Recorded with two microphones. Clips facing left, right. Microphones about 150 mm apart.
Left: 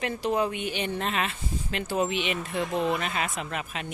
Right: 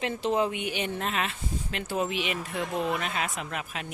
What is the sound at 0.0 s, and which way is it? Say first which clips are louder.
Speech: even; 20° right (ahead or behind).